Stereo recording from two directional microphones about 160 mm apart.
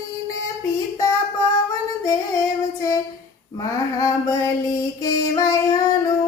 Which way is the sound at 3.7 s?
20° left (ahead or behind).